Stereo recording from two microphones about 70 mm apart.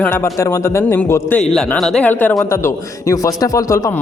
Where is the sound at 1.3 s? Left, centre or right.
Centre.